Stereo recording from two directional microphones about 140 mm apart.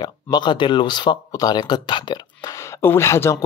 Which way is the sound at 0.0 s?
30° left (ahead or behind).